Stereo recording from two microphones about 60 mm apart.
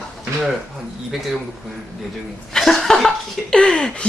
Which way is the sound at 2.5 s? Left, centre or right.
Centre.